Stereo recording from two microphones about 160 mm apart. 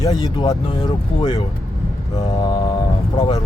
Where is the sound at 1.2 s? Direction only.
40° left (ahead or behind).